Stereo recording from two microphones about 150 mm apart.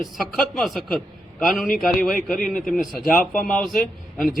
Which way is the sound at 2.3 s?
65° left (ahead or behind).